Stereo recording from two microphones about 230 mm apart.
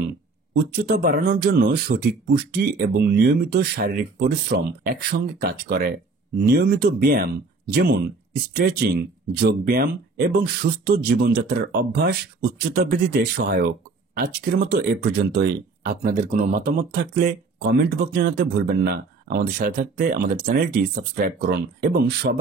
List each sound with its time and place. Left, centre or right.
0.7 s speech: right